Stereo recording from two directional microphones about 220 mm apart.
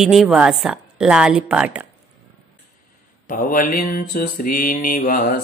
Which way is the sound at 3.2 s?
40° left (ahead or behind).